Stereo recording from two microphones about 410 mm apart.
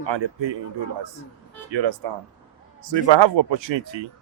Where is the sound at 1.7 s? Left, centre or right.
Right.